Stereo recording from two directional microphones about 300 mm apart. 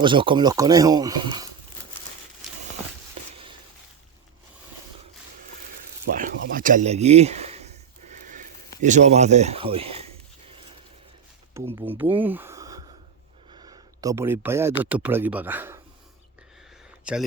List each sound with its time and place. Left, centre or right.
0.0 s speech: centre
6.1 s a sound: right
8.8 s speech: right
11.5 s speech: centre
17.0 s speech: centre